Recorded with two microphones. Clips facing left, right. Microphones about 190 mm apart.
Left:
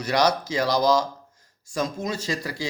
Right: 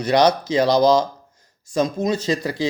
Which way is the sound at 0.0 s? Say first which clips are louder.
Right 5 dB; 20° right (ahead or behind).